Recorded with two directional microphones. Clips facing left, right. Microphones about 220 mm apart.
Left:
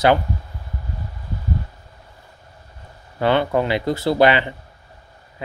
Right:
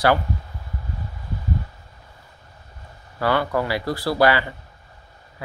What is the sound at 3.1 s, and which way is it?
Speech, 20° left (ahead or behind).